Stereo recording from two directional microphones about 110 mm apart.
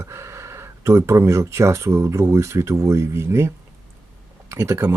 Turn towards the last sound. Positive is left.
turn(degrees=-25)  # may be behind; listen again after turning